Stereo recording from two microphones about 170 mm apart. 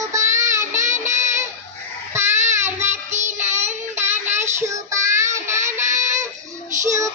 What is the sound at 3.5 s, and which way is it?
Child singing, 45° right (ahead or behind).